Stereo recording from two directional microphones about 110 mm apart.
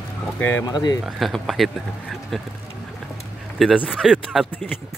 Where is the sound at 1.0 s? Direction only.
Centre (ahead or behind).